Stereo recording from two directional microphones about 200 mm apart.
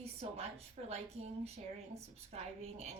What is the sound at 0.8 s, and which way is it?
Speech, 30° right (ahead or behind).